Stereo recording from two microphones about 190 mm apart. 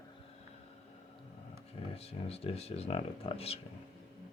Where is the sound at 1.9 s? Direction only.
30° left (ahead or behind).